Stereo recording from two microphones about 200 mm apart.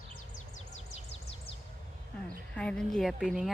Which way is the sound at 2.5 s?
5° left (ahead or behind).